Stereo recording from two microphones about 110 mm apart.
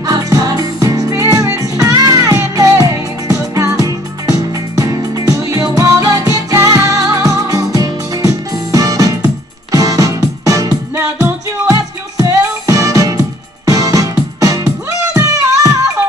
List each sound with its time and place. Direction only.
0.0 s music: 35° right (ahead or behind)